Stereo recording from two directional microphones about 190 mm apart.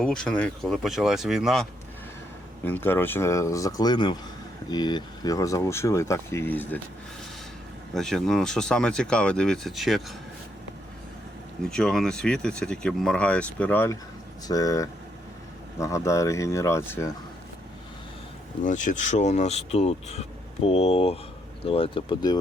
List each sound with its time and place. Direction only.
0.0 s speech: 5° left (ahead or behind)
2.6 s speech: 10° left (ahead or behind)
7.9 s speech: centre (ahead or behind)
11.6 s speech: 5° left (ahead or behind)
18.6 s speech: 40° left (ahead or behind); by 22.4 s 25° left (ahead or behind)